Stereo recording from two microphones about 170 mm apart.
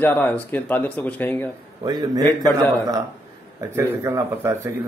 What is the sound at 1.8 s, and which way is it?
A man's voice, 25° right (ahead or behind).